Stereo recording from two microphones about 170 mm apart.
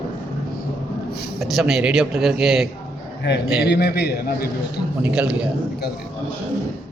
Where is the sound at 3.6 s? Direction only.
70° left (ahead or behind).